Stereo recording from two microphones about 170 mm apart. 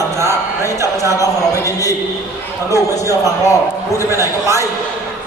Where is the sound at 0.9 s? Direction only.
20° left (ahead or behind).